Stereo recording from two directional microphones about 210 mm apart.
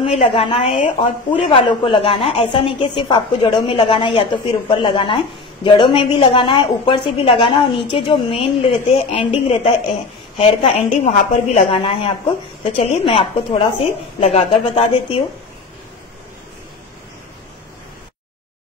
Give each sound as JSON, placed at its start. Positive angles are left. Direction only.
{"t": 0.0, "sound": "a woman's voice", "side_deg": 25}